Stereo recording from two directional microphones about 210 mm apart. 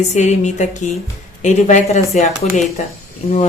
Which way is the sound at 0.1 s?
35° left (ahead or behind).